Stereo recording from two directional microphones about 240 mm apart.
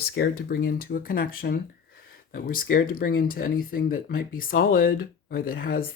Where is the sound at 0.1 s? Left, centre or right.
Left.